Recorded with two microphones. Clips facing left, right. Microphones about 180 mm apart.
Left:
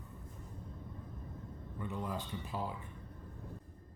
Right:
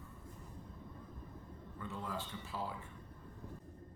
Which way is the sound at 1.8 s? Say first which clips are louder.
Left 3 dB; 15° left (ahead or behind).